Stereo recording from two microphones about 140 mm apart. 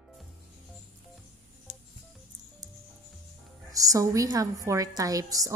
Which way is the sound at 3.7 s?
25° right (ahead or behind).